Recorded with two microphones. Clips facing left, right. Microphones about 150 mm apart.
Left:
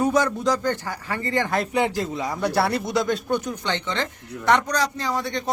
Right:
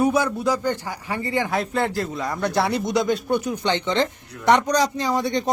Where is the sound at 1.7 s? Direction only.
15° left (ahead or behind).